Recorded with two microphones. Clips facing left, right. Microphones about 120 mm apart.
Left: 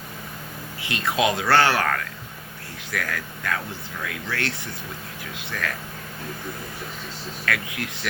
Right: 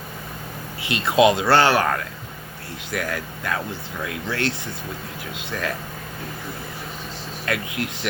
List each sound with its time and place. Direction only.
0.9 s speech: 20° right (ahead or behind)
7.4 s speech: 20° right (ahead or behind)